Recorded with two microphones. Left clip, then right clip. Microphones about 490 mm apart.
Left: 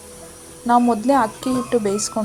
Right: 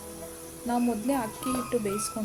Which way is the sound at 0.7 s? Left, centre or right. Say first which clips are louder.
Left 13 dB; right.